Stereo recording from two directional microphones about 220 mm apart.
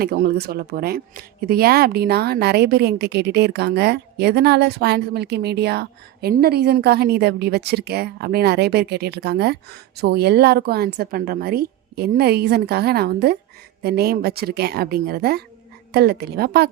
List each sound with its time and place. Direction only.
0.0 s speech: 45° right (ahead or behind)